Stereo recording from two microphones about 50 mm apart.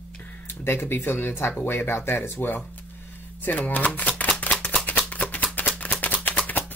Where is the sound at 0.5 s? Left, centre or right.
Left.